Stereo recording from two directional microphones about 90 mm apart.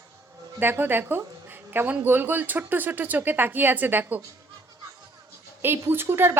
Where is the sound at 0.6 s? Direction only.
20° right (ahead or behind).